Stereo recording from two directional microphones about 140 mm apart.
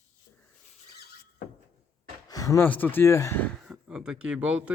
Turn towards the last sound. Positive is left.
turn(degrees=-10)  # may be behind; listen again after turning